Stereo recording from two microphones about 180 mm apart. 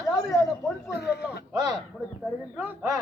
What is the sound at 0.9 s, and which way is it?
Speech, 65° left (ahead or behind).